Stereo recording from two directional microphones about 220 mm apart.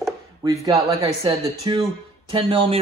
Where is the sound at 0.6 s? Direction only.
20° right (ahead or behind).